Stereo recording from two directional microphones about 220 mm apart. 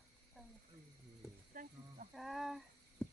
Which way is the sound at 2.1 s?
Centre (ahead or behind).